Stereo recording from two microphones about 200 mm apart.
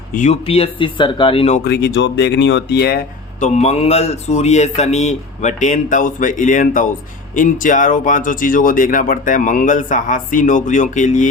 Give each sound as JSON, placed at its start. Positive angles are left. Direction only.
{"t": 0.1, "sound": "speech", "side_deg": 35}
{"t": 1.6, "sound": "speech", "side_deg": 60}
{"t": 3.4, "sound": "speech", "side_deg": 35}